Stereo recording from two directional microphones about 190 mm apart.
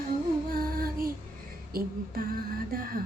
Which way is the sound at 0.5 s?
50° right (ahead or behind).